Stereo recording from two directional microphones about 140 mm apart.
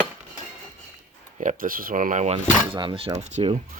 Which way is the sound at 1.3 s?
75° right (ahead or behind).